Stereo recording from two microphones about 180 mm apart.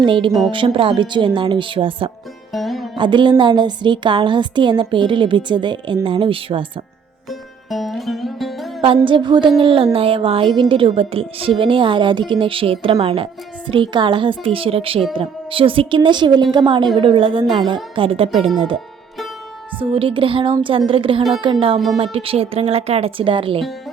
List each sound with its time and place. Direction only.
0.0 s a woman's voice: 25° right (ahead or behind)
0.3 s speech: centre (ahead or behind)
0.5 s a woman's voice: 30° right (ahead or behind)
2.5 s music: centre (ahead or behind)
3.0 s a woman's voice: 25° right (ahead or behind)
7.3 s music: centre (ahead or behind)
9.0 s a woman's voice: 25° right (ahead or behind)
19.8 s a woman's voice: 30° right (ahead or behind)